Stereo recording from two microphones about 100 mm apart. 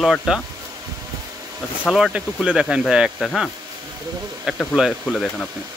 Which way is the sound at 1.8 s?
5° right (ahead or behind).